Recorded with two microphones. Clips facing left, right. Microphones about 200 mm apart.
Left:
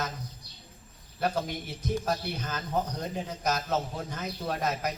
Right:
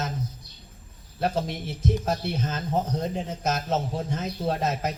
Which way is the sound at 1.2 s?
25° right (ahead or behind).